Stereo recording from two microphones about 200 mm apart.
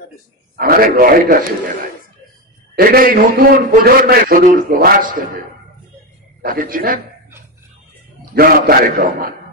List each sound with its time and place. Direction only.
0.6 s a man's voice: 45° right (ahead or behind)
2.7 s a man's voice: 50° right (ahead or behind)
6.4 s a man's voice: 45° right (ahead or behind)
8.4 s a man's voice: 50° right (ahead or behind)